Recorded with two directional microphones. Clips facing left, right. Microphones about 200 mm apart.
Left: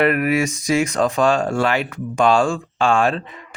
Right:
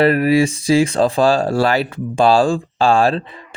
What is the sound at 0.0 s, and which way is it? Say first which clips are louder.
Speech: right 4 dB; 30° right (ahead or behind).